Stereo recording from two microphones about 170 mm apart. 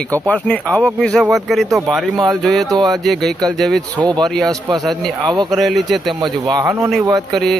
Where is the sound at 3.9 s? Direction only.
25° right (ahead or behind).